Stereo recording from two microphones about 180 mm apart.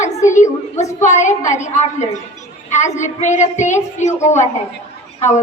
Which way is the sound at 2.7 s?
40° left (ahead or behind).